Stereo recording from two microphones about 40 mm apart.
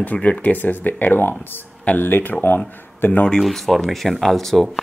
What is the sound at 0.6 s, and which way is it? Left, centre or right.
Speech, left.